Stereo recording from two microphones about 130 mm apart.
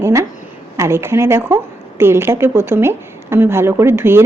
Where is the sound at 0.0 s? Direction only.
20° right (ahead or behind).